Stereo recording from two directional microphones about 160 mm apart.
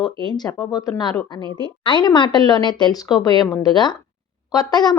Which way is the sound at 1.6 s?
30° left (ahead or behind).